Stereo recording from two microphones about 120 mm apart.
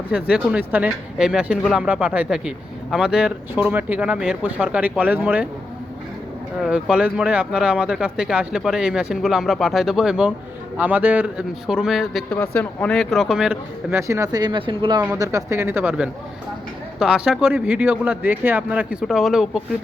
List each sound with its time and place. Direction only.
0.1 s speech: 10° right (ahead or behind)
6.6 s speech: 5° right (ahead or behind)
12.3 s speech: 15° left (ahead or behind); by 13.6 s 5° right (ahead or behind)
13.9 s speech: 25° right (ahead or behind)
14.4 s speech: 40° right (ahead or behind)
15.2 s speech: 25° right (ahead or behind); by 19.6 s 5° right (ahead or behind)